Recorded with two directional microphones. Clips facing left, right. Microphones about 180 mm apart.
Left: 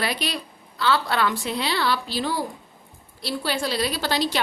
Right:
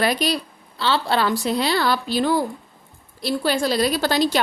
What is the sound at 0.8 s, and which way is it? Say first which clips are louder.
A woman's voice: right 2 dB; 30° right (ahead or behind).